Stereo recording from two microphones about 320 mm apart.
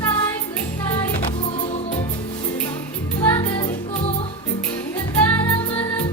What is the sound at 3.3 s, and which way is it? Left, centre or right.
Music, centre.